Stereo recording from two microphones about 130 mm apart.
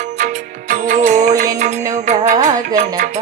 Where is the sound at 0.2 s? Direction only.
80° right.